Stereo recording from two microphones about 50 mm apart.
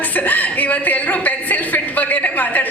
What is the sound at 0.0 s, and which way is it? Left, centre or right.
A woman's voice, left.